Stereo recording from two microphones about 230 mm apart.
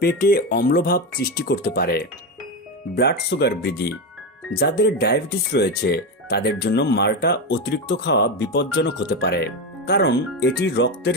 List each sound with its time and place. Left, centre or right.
0.0 s speech: left